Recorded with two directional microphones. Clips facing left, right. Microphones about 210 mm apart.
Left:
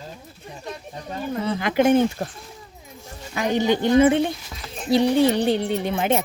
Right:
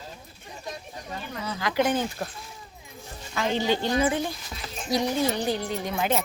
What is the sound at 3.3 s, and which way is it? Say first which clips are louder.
A woman's voice: left 5 dB; 15° left (ahead or behind).